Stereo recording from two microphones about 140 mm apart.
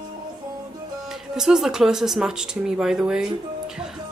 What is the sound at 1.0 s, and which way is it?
Speech, 5° right (ahead or behind).